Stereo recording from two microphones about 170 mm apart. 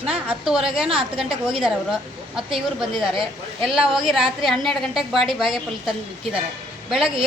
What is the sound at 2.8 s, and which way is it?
A woman's voice, centre (ahead or behind).